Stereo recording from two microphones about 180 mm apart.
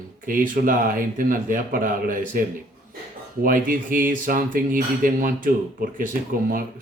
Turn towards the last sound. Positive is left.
turn(degrees=-50)  # may be behind; listen again after turning